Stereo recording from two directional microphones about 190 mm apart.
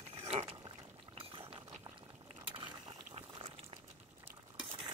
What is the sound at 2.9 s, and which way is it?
Boiling, 30° right (ahead or behind).